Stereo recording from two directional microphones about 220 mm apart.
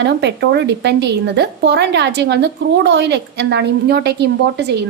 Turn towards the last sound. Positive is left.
turn(degrees=-50)  # may be behind; listen again after turning